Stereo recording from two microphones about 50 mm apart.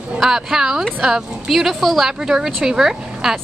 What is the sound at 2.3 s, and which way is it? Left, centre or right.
Speech, centre.